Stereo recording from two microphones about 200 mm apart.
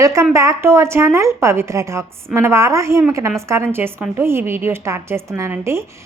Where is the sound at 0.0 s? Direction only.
15° right (ahead or behind).